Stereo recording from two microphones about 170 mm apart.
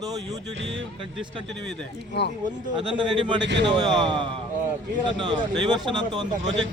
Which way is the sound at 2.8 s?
30° right (ahead or behind).